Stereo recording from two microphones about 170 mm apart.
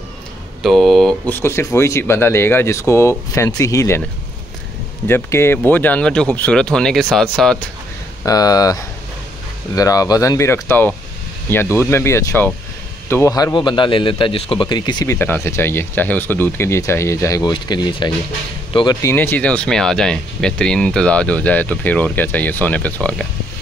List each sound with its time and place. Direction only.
0.6 s speech: centre (ahead or behind); by 4.0 s 15° left (ahead or behind)
5.0 s speech: 15° left (ahead or behind)
8.3 s a man's voice: 20° left (ahead or behind)
15.1 s speech: 10° left (ahead or behind); by 18.9 s 30° left (ahead or behind)
18.9 s speech: 15° left (ahead or behind)